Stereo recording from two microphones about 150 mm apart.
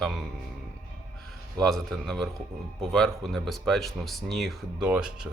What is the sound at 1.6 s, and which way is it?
Speech, centre (ahead or behind).